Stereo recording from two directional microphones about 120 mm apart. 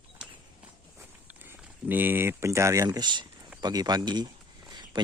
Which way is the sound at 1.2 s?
15° right (ahead or behind).